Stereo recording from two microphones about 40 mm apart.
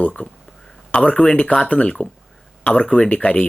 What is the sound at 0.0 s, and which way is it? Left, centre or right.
Speech, left.